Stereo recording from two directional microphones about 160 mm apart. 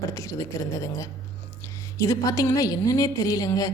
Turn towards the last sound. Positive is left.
turn(degrees=20)  # may be behind; listen again after turning